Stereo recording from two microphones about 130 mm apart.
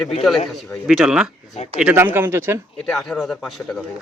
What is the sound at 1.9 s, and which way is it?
Speech, 15° right (ahead or behind).